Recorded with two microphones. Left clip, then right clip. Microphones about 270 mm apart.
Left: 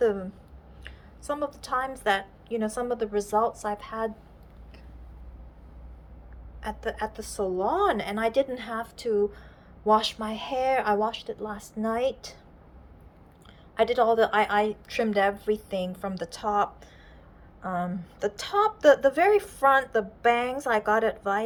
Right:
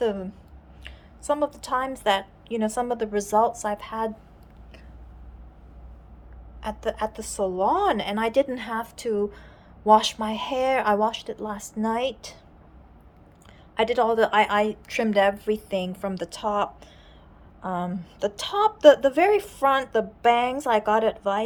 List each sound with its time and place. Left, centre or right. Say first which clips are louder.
0.0 s a woman's voice: left 1 dB; centre
6.6 s a woman's voice: right 4 dB; centre
13.7 s a woman's voice: right 1 dB; centre